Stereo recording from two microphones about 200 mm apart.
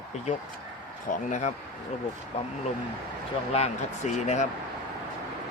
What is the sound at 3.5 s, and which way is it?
Speech, 35° left (ahead or behind).